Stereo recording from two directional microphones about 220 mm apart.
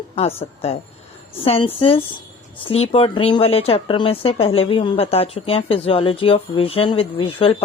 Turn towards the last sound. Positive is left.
turn(degrees=25)  # may be behind; listen again after turning